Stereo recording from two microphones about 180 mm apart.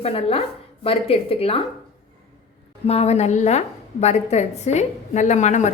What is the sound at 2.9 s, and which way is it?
A woman's voice, 35° left (ahead or behind).